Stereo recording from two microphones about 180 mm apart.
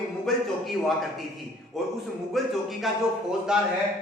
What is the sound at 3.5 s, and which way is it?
Speech, 5° right (ahead or behind).